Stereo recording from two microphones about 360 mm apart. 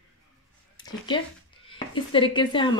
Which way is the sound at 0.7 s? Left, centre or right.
Centre.